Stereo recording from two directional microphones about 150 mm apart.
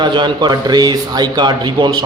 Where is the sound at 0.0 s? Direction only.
30° right (ahead or behind).